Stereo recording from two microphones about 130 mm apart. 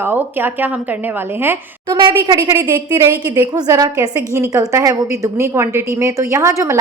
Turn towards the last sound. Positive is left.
turn(degrees=-25)  # may be behind; listen again after turning